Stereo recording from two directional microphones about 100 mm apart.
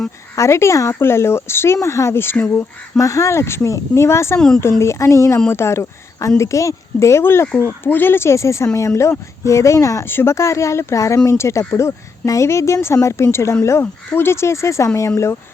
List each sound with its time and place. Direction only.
0.3 s a woman's voice: 30° left (ahead or behind)
3.0 s a woman's voice: 30° left (ahead or behind)
4.4 s speech: 5° left (ahead or behind)
4.8 s a woman's voice: 30° left (ahead or behind)